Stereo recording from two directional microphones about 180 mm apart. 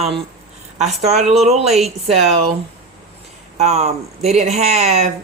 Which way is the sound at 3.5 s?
35° right (ahead or behind).